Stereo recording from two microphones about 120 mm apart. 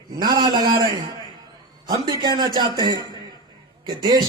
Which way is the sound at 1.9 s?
35° right (ahead or behind).